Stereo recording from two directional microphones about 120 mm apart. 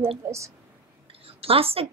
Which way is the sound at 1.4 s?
55° right (ahead or behind).